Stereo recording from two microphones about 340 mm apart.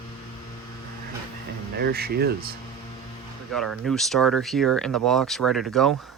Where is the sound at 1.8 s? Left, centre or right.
Right.